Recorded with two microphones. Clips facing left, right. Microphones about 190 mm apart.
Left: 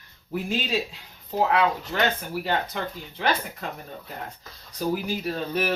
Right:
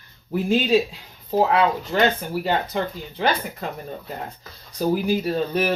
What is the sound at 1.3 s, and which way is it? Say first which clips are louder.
Speech: right 4 dB; 35° right (ahead or behind).